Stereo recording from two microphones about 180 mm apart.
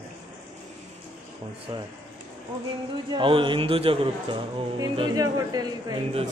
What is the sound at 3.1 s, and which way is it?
A man's voice, 30° right (ahead or behind).